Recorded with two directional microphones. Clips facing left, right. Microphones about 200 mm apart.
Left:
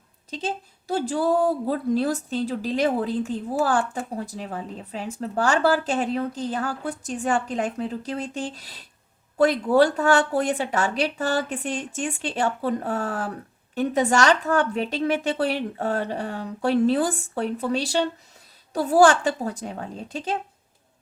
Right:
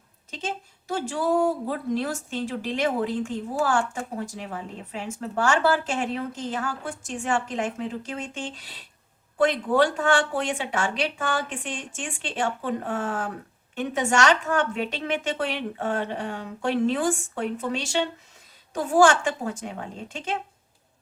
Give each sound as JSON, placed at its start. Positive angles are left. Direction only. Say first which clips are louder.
{"t": 0.3, "sound": "a woman's voice", "louder": "left 3 dB", "side_deg": 35}